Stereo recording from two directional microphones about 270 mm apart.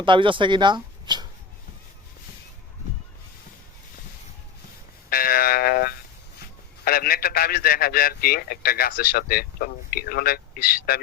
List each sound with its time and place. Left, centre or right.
0.0 s speech: centre
5.0 s a sound: left
6.8 s a man's voice: left